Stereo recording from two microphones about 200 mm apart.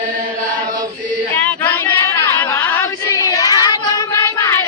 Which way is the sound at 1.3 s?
10° left (ahead or behind).